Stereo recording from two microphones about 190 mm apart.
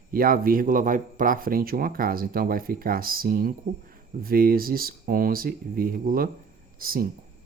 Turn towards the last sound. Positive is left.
turn(degrees=-50)  # may be behind; listen again after turning